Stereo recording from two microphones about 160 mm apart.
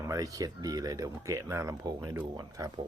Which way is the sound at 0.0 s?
20° right (ahead or behind).